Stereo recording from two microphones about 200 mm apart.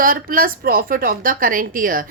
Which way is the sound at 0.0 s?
45° right (ahead or behind).